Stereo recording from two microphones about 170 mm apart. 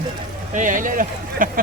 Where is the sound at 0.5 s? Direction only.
50° right (ahead or behind).